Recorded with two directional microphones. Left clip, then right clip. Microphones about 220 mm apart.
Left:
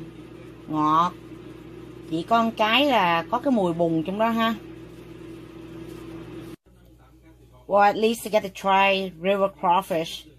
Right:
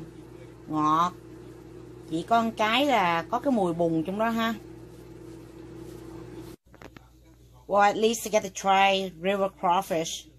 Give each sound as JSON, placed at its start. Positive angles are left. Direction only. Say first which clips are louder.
{"t": 0.7, "sound": "speech", "louder": "left 3 dB", "side_deg": 5}
{"t": 7.6, "sound": "speech", "louder": "left 3 dB", "side_deg": 5}